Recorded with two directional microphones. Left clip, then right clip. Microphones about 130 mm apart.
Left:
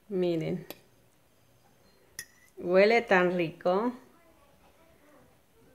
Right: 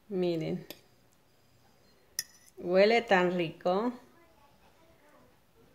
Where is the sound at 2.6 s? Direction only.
5° left (ahead or behind).